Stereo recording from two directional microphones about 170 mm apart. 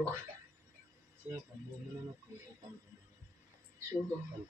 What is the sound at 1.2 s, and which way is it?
Speech, 10° right (ahead or behind).